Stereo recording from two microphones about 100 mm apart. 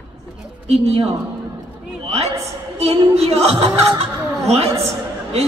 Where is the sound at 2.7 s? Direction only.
85° right.